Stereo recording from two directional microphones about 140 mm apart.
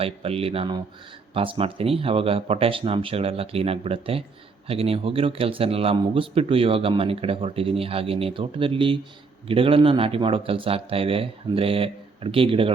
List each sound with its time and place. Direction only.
0.0 s speech: 45° right (ahead or behind)